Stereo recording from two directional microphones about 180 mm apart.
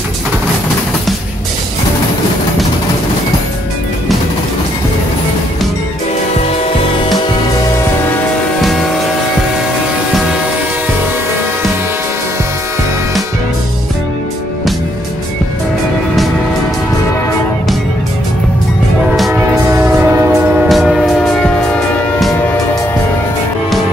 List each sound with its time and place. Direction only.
19.1 s train: centre (ahead or behind)
19.7 s train: 15° right (ahead or behind)
20.6 s music: centre (ahead or behind)